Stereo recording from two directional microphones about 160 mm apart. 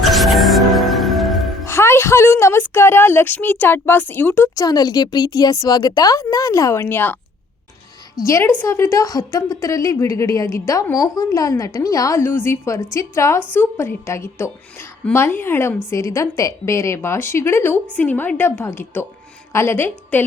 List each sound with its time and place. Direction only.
0.0 s music: centre (ahead or behind)
1.6 s a woman's voice: 15° left (ahead or behind)
8.2 s a woman's voice: 20° left (ahead or behind)